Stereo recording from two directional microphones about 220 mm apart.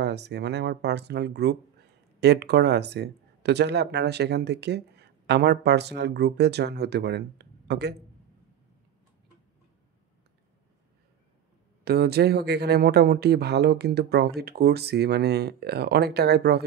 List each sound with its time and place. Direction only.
0.0 s speech: 50° right (ahead or behind)
11.8 s speech: 45° right (ahead or behind)